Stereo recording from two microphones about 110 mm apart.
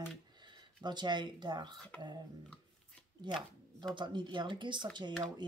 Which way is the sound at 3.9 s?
45° right (ahead or behind).